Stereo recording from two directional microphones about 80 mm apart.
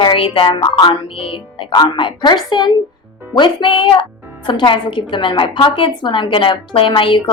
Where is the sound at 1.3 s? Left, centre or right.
Left.